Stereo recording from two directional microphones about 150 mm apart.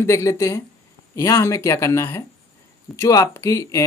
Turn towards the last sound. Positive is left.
turn(degrees=20)  # may be behind; listen again after turning